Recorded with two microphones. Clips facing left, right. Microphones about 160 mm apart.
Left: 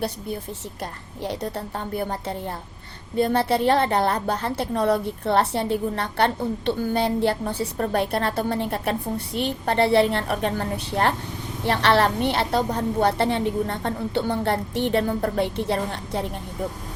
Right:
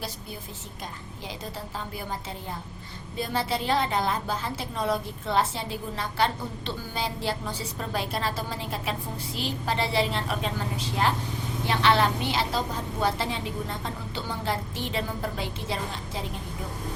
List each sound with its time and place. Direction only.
0.8 s a woman's voice: 65° left (ahead or behind)